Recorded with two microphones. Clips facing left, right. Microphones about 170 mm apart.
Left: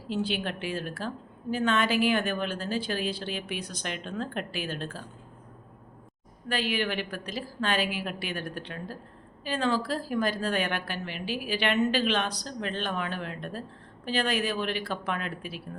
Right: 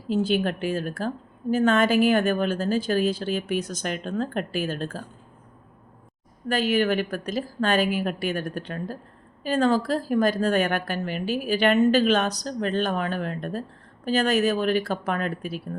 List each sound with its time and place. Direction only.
0.1 s a woman's voice: 45° right (ahead or behind)
6.5 s a woman's voice: 45° right (ahead or behind)